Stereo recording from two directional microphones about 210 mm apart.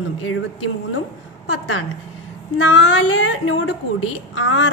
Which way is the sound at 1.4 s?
70° left (ahead or behind).